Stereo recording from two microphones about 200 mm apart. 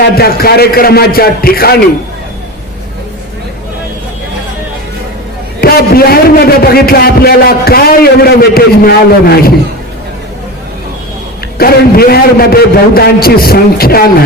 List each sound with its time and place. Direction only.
0.2 s a man's voice: 50° left (ahead or behind)
5.5 s a man's voice: 50° left (ahead or behind)
11.5 s a man's voice: 50° left (ahead or behind)